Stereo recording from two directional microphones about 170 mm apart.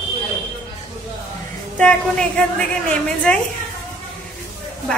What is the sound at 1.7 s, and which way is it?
A woman's voice, 5° left (ahead or behind).